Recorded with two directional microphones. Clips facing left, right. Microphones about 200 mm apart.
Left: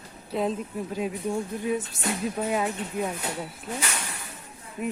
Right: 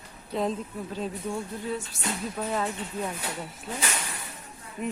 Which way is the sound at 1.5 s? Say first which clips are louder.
Left 5 dB; 15° left (ahead or behind).